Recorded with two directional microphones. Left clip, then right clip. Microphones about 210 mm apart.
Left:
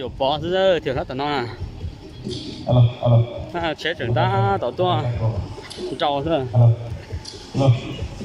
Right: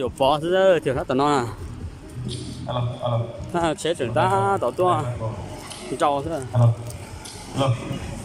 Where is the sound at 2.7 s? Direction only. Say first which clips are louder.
Left 6 dB; 40° left (ahead or behind).